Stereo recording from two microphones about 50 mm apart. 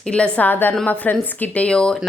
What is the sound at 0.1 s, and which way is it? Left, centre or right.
Speech, left.